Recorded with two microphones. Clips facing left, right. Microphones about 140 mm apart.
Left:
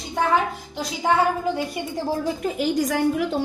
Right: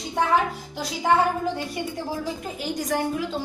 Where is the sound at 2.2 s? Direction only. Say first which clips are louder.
Left 6 dB; 90° left.